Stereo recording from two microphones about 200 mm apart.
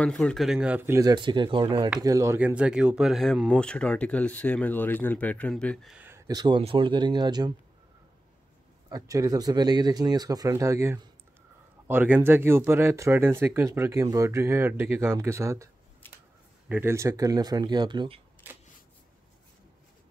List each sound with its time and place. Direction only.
0.0 s speech: 5° left (ahead or behind)
5.9 s speech: 10° right (ahead or behind)
8.8 s speech: 15° right (ahead or behind)